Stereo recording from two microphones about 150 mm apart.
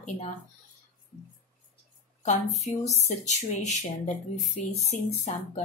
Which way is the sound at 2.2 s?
50° left (ahead or behind).